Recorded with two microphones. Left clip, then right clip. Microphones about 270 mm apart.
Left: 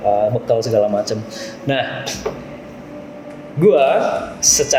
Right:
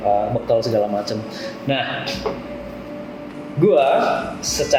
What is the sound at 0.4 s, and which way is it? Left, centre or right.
Speech, left.